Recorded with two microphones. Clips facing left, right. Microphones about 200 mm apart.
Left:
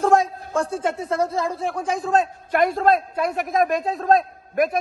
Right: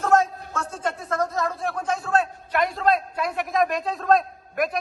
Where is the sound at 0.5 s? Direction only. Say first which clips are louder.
Left 6 dB; 30° left (ahead or behind).